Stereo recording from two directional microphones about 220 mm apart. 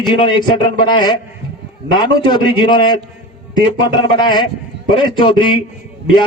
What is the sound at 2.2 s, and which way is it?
Speech, 20° left (ahead or behind).